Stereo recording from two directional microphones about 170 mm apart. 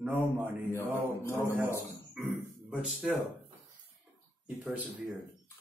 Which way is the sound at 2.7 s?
5° right (ahead or behind).